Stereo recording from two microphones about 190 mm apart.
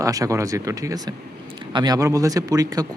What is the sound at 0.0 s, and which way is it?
Speech, 15° right (ahead or behind).